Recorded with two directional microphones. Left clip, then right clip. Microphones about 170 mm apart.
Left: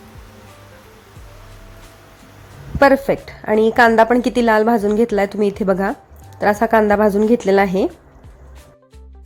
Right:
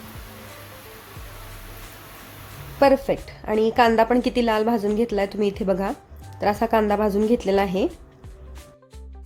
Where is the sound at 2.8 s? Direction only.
20° left (ahead or behind).